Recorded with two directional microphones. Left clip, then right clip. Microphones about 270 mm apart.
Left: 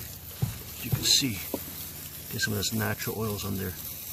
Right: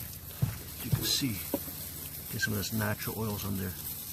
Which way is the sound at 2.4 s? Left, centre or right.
Centre.